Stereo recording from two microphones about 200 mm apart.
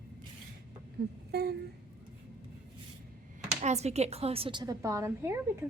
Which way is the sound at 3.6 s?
35° right (ahead or behind).